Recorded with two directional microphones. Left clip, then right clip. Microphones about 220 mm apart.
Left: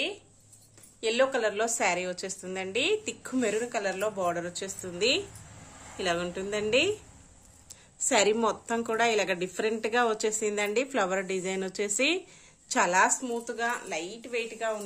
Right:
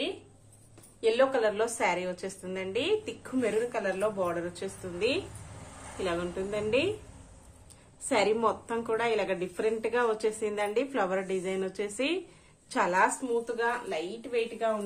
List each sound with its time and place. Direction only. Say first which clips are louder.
1.0 s a woman's voice: right 1 dB; 30° left (ahead or behind)
8.1 s a woman's voice: left 1 dB; 30° left (ahead or behind)